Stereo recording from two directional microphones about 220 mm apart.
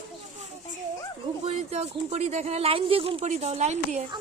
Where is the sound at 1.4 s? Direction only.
30° right (ahead or behind).